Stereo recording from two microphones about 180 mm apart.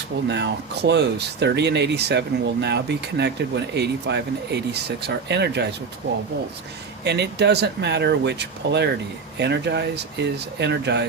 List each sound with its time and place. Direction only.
0.3 s speech: 70° right (ahead or behind)
7.0 s speech: 70° right (ahead or behind)